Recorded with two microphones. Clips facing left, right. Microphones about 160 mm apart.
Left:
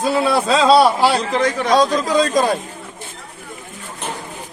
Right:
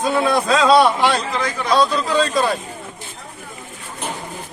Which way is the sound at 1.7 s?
40° left (ahead or behind).